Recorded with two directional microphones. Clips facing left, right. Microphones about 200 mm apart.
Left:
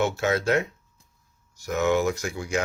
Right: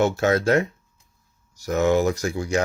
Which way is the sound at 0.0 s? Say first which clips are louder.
Right 4 dB; 40° right (ahead or behind).